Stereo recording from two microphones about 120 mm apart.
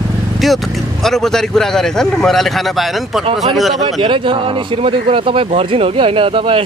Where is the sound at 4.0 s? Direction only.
40° right (ahead or behind).